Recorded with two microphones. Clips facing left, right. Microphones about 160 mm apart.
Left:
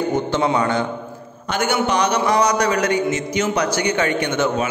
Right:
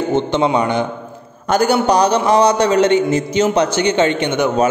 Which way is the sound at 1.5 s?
35° right (ahead or behind).